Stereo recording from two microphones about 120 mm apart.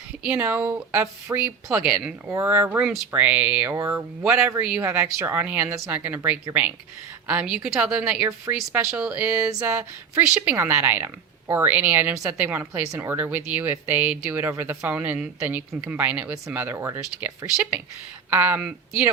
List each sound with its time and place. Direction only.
0.2 s speech: 10° right (ahead or behind)
4.2 s speech: 10° right (ahead or behind)